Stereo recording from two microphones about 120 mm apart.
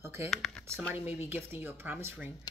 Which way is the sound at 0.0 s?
20° right (ahead or behind).